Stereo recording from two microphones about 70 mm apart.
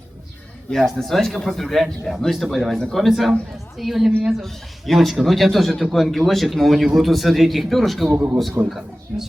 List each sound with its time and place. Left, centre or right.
0.7 s speech: centre
8.1 s a man's voice: right
9.1 s speech: centre